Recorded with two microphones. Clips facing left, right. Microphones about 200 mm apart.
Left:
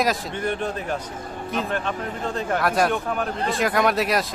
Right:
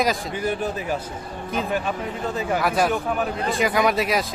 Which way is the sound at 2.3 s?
5° right (ahead or behind).